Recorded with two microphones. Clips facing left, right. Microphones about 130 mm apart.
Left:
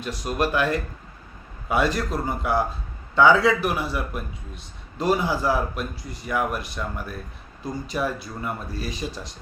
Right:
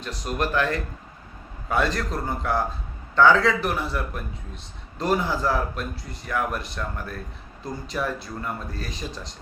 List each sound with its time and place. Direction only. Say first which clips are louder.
0.0 s speech: left 2 dB; 10° left (ahead or behind)